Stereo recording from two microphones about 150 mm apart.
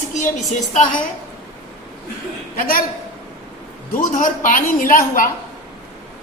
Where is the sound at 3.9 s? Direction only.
60° left (ahead or behind).